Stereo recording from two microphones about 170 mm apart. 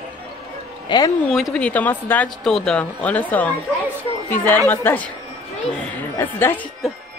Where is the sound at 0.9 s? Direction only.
25° left (ahead or behind).